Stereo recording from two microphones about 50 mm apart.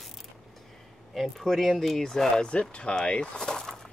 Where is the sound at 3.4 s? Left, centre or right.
Centre.